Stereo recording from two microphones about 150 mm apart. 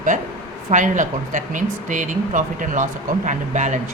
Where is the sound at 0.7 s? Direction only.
55° right (ahead or behind).